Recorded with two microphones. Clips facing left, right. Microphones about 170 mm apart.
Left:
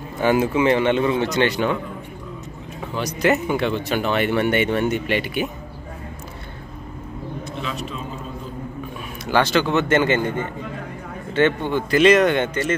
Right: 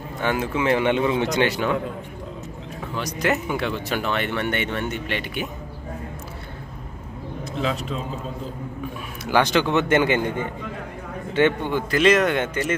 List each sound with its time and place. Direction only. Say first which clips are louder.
0.2 s speech: left 6 dB; 5° left (ahead or behind)
0.7 s a man's voice: left 2 dB; 10° right (ahead or behind)
3.0 s speech: left 4 dB; centre (ahead or behind)
9.2 s a man's voice: left 1 dB; 15° right (ahead or behind)
11.9 s speech: left 4 dB; centre (ahead or behind)